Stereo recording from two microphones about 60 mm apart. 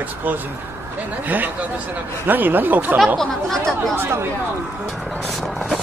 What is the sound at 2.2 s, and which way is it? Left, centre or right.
Speech, right.